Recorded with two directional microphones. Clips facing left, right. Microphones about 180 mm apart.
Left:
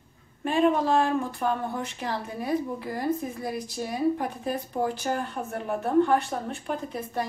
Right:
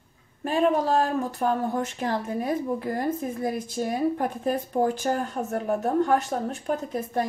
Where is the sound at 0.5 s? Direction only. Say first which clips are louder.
Even; 40° right (ahead or behind).